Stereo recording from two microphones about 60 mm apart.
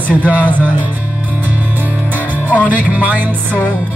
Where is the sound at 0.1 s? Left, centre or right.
Right.